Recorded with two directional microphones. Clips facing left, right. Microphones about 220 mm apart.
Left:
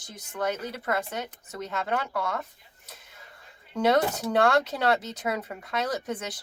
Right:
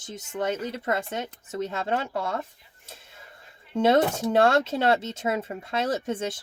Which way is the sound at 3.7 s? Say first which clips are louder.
Right 3 dB; 25° right (ahead or behind).